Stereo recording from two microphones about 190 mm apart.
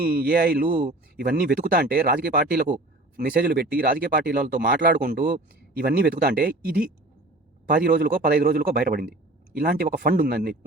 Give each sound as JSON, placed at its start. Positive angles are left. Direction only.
{"t": 0.0, "sound": "speech", "side_deg": -50}